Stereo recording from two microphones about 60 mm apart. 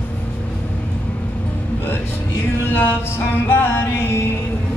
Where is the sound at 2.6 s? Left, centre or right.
Left.